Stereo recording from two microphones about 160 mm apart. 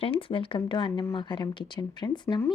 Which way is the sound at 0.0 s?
35° left (ahead or behind).